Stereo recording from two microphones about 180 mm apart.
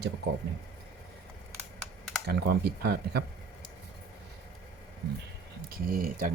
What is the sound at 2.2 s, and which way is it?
Speech, 65° right (ahead or behind).